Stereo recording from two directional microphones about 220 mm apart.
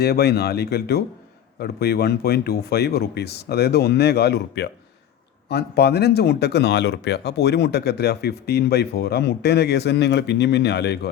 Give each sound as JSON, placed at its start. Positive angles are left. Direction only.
{"t": 0.0, "sound": "speech", "side_deg": 45}